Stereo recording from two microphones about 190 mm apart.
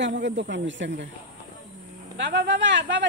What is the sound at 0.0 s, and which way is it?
Speech, 70° right (ahead or behind).